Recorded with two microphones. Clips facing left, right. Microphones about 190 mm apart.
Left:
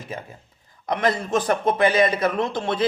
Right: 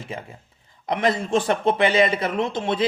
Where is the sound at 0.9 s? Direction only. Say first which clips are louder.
Right 1 dB; 25° right (ahead or behind).